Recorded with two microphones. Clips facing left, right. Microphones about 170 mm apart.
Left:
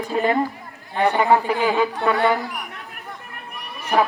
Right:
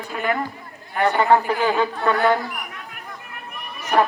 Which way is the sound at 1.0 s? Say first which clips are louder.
Even; 10° left (ahead or behind).